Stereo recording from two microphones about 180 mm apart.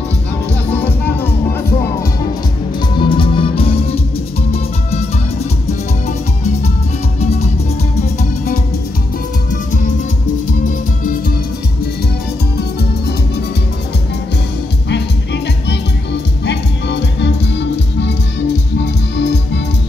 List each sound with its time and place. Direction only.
0.7 s music: 10° left (ahead or behind)
3.0 s music: 30° left (ahead or behind)
7.2 s music: 35° left (ahead or behind)
14.9 s music: 70° left (ahead or behind)